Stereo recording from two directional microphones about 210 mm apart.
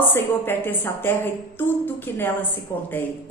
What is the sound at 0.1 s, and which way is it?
A woman's voice, 10° left (ahead or behind).